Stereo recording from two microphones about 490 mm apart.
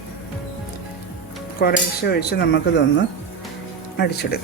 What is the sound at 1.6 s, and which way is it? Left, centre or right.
Cutlery, centre.